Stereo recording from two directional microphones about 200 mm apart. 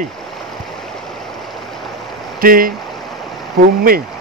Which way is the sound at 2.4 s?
45° right (ahead or behind).